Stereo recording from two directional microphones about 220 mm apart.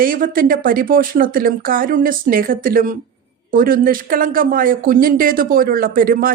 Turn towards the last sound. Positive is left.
turn(degrees=-40)  # may be behind; listen again after turning